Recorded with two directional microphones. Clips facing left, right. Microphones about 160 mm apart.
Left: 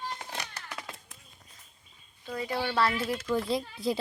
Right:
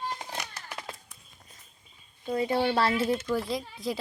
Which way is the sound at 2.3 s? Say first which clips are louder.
Right 6 dB; 25° right (ahead or behind).